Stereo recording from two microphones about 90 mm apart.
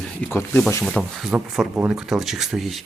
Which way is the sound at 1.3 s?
20° right (ahead or behind).